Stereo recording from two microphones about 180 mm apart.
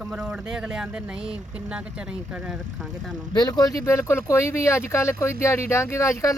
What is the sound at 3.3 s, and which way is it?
Speech, 20° left (ahead or behind).